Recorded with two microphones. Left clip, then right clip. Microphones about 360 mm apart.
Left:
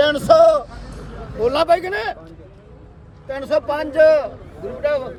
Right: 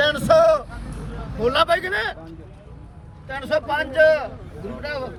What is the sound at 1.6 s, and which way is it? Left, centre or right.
Speech, centre.